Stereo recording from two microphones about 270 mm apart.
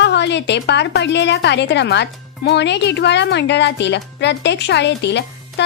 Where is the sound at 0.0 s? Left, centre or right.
Left.